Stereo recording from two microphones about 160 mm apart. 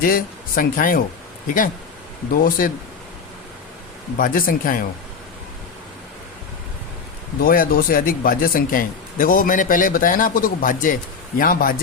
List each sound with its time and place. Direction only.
0.0 s speech: 60° left (ahead or behind)
4.2 s speech: 60° left (ahead or behind)
7.4 s speech: 65° left (ahead or behind)